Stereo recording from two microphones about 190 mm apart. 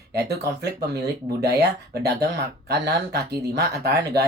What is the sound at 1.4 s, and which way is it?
Speech, 60° right (ahead or behind).